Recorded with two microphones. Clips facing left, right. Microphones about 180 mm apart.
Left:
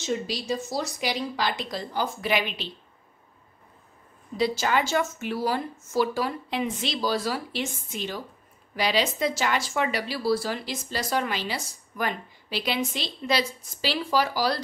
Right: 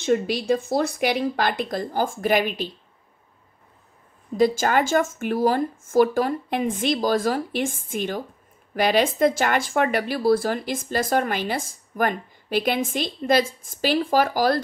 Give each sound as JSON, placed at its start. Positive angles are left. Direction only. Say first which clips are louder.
{"t": 0.0, "sound": "speech", "louder": "right 7 dB", "side_deg": -55}
{"t": 4.4, "sound": "speech", "louder": "right 5 dB", "side_deg": -50}